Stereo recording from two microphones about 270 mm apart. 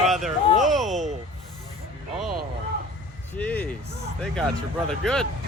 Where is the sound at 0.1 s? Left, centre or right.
Centre.